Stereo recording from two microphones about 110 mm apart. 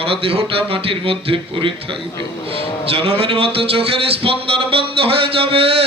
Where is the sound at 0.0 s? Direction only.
60° right (ahead or behind).